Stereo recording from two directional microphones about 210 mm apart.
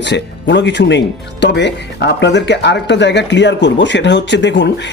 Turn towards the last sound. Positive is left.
turn(degrees=55)  # may be behind; listen again after turning